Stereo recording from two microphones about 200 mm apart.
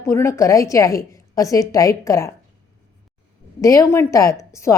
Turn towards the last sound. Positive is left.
turn(degrees=15)  # may be behind; listen again after turning